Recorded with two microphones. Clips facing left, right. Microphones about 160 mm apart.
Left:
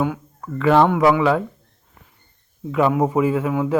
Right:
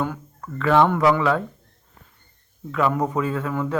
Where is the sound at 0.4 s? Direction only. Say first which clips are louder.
Left 3 dB; 20° left (ahead or behind).